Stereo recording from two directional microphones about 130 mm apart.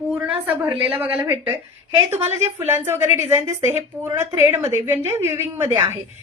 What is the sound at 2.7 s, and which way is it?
A woman's voice, 20° right (ahead or behind).